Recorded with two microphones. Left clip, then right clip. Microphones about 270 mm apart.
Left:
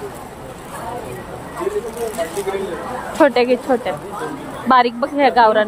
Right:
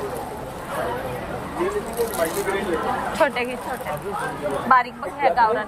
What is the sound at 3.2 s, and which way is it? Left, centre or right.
Speech, left.